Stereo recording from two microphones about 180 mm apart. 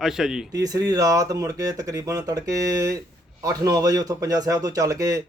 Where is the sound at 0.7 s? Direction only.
20° right (ahead or behind).